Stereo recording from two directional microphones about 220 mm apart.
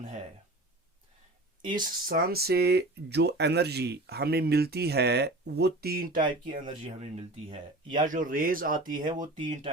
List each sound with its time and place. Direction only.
1.6 s speech: 20° right (ahead or behind)
2.0 s speech: 40° right (ahead or behind)
6.5 s speech: 25° right (ahead or behind)
8.9 s speech: 20° right (ahead or behind)